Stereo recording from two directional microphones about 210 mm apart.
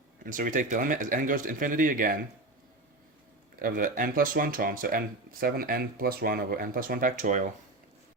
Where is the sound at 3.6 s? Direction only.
40° right (ahead or behind).